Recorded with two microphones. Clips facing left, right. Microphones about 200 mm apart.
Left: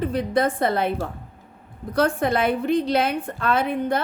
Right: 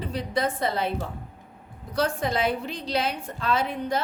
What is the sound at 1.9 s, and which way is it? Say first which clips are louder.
A woman's voice: left 5 dB; 55° left (ahead or behind).